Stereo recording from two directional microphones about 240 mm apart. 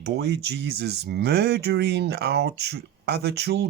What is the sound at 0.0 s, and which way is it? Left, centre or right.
Speech, right.